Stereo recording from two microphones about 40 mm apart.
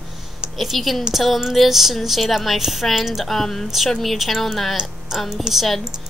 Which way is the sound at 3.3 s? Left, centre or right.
Centre.